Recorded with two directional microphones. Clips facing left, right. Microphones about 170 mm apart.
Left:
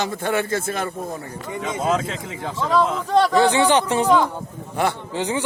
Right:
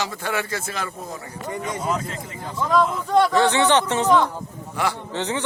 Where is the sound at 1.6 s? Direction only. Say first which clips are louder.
Left 5 dB; 90° left.